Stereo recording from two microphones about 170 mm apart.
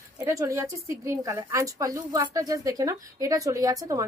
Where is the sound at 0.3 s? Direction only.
15° right (ahead or behind).